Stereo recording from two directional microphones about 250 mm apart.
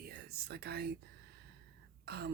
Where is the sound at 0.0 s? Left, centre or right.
Right.